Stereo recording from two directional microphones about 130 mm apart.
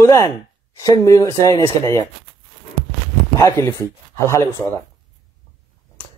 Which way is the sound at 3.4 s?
20° left (ahead or behind).